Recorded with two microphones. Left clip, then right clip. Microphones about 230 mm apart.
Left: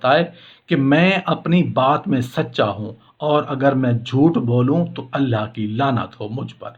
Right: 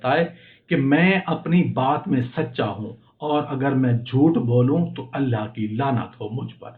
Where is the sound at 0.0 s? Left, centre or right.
Left.